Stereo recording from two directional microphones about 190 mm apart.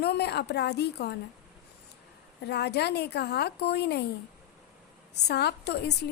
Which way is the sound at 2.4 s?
60° left (ahead or behind).